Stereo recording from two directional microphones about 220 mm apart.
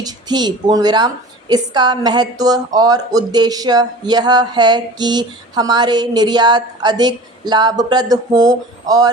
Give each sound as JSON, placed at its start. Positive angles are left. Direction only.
{"t": 0.0, "sound": "speech", "side_deg": -20}